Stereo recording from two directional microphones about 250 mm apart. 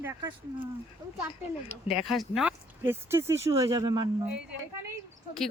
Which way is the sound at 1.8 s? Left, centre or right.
Centre.